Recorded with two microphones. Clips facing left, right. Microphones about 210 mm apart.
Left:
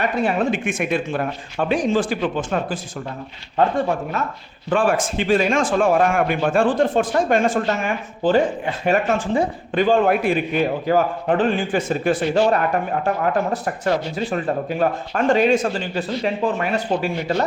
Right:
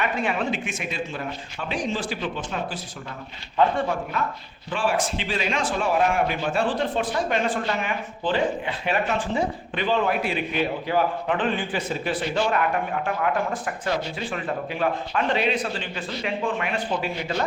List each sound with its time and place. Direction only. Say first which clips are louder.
0.0 s a man's voice: left 5 dB; 40° left (ahead or behind)
4.7 s a man's voice: left 6 dB; 50° left (ahead or behind)